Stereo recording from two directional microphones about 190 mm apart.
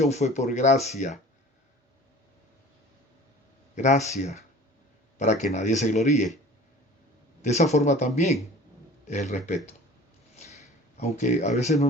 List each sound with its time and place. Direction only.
0.0 s speech: 35° left (ahead or behind)
3.8 s speech: 40° left (ahead or behind)
7.4 s speech: 35° left (ahead or behind)
10.9 s speech: 35° left (ahead or behind)